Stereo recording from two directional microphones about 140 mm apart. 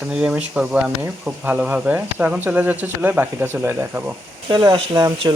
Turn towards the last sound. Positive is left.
turn(degrees=-30)  # may be behind; listen again after turning